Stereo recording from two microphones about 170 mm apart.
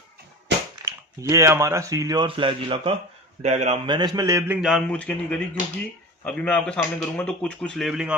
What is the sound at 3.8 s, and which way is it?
Speech, 25° right (ahead or behind).